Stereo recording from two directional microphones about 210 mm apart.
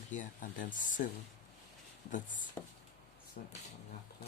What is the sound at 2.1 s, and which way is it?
Speech, 35° left (ahead or behind).